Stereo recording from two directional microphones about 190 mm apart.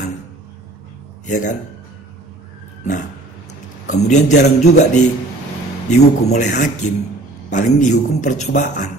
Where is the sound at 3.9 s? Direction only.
40° left (ahead or behind).